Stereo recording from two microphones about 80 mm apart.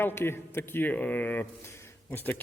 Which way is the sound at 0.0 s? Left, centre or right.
Left.